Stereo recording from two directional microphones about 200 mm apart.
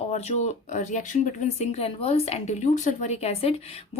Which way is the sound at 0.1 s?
35° left (ahead or behind).